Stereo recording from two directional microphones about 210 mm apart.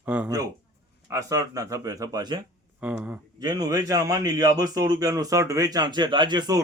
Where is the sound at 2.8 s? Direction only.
5° right (ahead or behind).